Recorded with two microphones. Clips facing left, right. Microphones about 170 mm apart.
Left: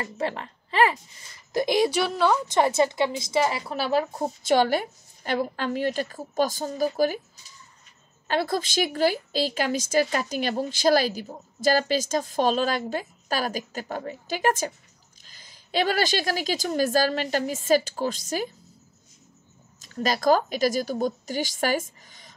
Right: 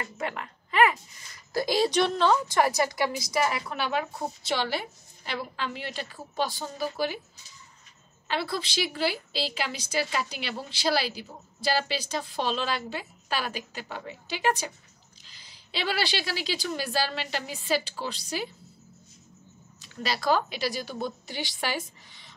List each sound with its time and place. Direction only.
0.0 s speech: 30° left (ahead or behind)
1.5 s a woman's voice: 20° left (ahead or behind)
1.9 s a woman's voice: 5° left (ahead or behind)
2.4 s a woman's voice: 20° left (ahead or behind)
4.4 s a woman's voice: 50° left (ahead or behind)
8.3 s a woman's voice: 45° left (ahead or behind)
19.8 s a woman's voice: 45° left (ahead or behind)